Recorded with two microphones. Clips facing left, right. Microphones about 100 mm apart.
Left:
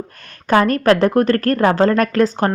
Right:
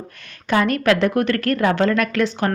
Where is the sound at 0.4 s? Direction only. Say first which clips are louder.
Left 4 dB; 40° left (ahead or behind).